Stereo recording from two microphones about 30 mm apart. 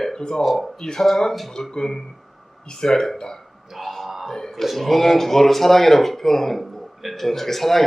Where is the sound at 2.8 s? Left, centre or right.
Left.